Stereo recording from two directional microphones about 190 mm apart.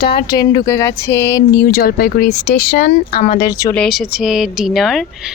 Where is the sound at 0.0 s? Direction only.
55° left (ahead or behind).